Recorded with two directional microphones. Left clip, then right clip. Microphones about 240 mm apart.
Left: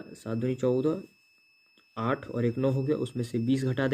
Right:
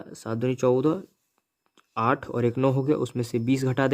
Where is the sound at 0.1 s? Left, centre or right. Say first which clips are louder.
Right 4 dB; right.